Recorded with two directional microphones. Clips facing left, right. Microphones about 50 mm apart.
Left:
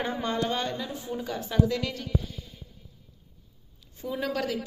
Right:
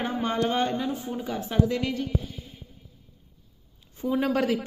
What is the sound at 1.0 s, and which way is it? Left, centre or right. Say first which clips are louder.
Speech: right 2 dB; centre.